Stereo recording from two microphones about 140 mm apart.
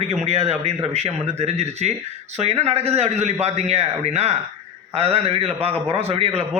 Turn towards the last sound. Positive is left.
turn(degrees=-45)  # may be behind; listen again after turning